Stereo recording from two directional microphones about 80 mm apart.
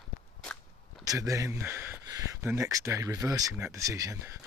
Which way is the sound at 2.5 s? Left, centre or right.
Right.